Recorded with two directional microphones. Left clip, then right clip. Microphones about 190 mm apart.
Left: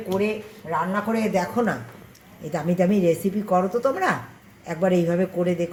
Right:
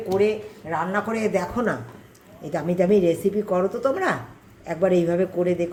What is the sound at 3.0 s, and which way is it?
Speech, 20° left (ahead or behind).